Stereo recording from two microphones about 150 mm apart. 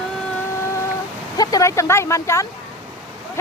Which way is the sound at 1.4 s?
25° left (ahead or behind).